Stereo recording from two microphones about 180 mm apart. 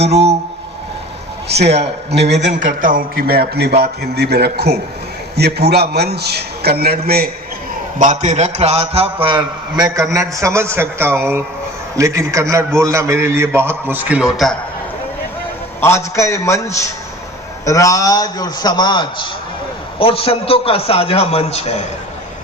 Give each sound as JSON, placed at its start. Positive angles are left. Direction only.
{"t": 0.0, "sound": "a man's voice", "side_deg": -35}
{"t": 1.6, "sound": "a man's voice", "side_deg": -35}
{"t": 7.9, "sound": "a man's voice", "side_deg": -45}
{"t": 15.8, "sound": "a man's voice", "side_deg": 15}